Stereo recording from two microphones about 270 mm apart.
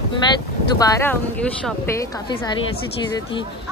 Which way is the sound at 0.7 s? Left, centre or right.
Centre.